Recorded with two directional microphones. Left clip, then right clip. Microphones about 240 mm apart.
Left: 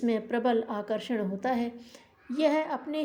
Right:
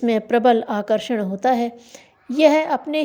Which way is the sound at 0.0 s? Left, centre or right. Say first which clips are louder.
Right 11 dB; right.